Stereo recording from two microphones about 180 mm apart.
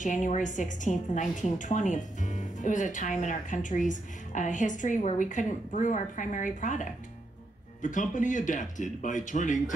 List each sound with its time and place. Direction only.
0.0 s a woman's voice: 45° left (ahead or behind)